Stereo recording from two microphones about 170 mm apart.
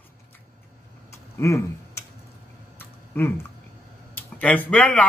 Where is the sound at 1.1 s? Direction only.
15° left (ahead or behind).